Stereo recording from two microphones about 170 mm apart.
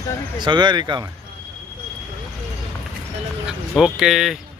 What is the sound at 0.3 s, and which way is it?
Speech, 25° right (ahead or behind).